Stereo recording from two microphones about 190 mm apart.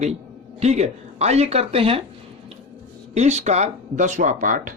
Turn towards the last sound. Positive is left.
turn(degrees=-45)  # may be behind; listen again after turning